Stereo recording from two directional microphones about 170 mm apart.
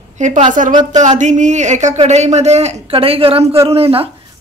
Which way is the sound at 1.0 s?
45° right (ahead or behind).